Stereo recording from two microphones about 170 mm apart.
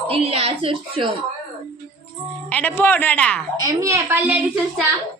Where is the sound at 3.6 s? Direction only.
20° right (ahead or behind); by 4.8 s 5° right (ahead or behind).